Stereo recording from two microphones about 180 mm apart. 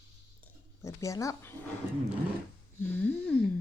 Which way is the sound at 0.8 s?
15° left (ahead or behind).